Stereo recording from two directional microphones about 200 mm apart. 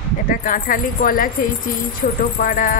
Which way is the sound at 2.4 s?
45° left (ahead or behind).